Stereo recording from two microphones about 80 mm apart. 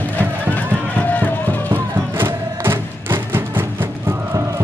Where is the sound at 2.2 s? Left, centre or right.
Right.